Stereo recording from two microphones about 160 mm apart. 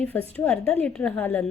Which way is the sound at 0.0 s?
10° left (ahead or behind).